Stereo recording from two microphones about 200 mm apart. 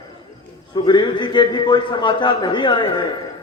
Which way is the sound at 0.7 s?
20° left (ahead or behind).